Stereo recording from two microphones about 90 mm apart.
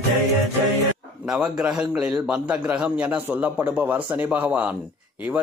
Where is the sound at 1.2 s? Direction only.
10° right (ahead or behind).